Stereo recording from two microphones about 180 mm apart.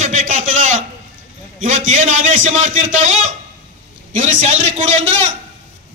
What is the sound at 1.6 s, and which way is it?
A man's voice, 45° right (ahead or behind).